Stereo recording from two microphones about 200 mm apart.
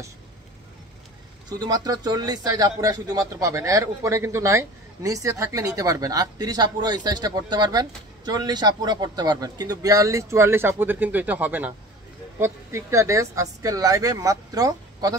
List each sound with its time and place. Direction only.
1.6 s speech: 20° right (ahead or behind)